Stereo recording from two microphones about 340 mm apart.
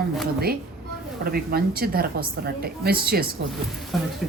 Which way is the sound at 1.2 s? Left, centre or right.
Right.